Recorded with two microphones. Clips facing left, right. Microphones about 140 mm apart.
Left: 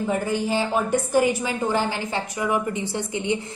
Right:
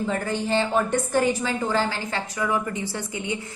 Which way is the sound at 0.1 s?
10° left (ahead or behind).